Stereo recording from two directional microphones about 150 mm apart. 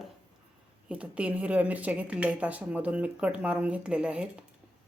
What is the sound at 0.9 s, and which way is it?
A woman's voice, 10° right (ahead or behind).